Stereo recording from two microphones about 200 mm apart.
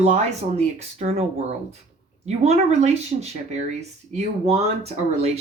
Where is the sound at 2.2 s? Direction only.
35° right (ahead or behind).